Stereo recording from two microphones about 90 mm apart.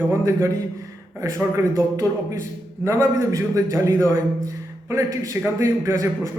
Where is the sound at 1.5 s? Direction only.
35° right (ahead or behind).